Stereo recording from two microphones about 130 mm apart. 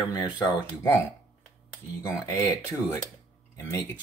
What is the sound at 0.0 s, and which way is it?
Speech, 25° left (ahead or behind).